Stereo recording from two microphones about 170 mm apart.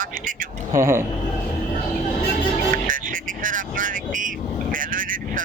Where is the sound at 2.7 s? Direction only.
50° right (ahead or behind).